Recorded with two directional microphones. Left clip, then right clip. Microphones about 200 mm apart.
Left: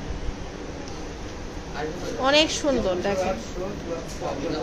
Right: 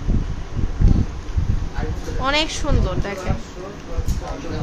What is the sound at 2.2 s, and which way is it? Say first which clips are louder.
Speech: left 1 dB; centre (ahead or behind).